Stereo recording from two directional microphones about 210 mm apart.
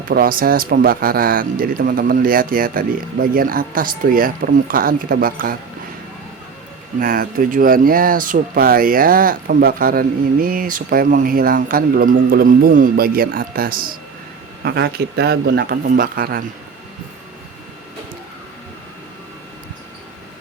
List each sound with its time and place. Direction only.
0.1 s speech: 45° right (ahead or behind)
7.0 s speech: 40° right (ahead or behind)